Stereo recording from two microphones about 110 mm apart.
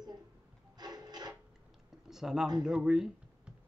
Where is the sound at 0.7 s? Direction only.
40° right (ahead or behind).